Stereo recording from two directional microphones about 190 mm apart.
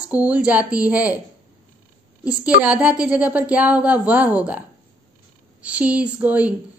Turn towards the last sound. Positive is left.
turn(degrees=-5)  # may be behind; listen again after turning